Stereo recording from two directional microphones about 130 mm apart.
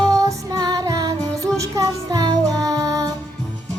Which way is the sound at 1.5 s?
25° right (ahead or behind).